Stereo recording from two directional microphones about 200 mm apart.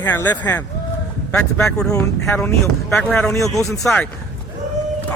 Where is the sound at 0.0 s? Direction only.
10° left (ahead or behind).